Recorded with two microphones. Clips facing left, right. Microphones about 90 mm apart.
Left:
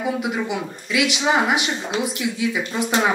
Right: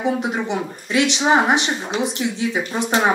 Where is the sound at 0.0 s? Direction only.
35° right (ahead or behind).